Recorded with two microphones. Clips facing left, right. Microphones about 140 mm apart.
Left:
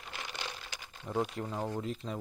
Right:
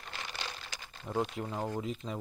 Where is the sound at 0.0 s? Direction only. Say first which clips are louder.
Even; 10° left (ahead or behind).